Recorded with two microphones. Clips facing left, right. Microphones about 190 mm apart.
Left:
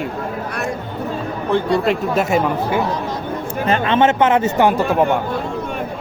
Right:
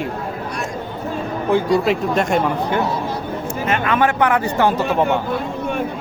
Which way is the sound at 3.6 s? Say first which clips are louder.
Left 3 dB; 30° left (ahead or behind).